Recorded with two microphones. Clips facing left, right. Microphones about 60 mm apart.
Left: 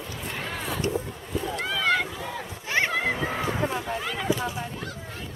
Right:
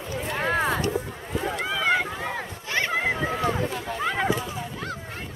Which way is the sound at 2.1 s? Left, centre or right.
Right.